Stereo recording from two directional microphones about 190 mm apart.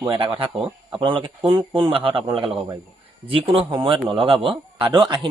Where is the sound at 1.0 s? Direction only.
25° right (ahead or behind).